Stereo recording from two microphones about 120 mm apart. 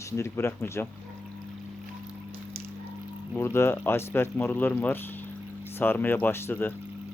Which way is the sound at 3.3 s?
20° left (ahead or behind).